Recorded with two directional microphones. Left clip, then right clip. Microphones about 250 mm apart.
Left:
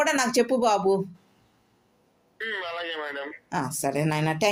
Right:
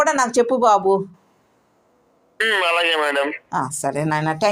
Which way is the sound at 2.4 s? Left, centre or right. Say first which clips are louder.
Right 14 dB; right.